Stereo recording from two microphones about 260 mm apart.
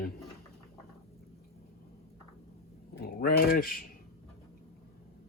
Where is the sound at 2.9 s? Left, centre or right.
Left.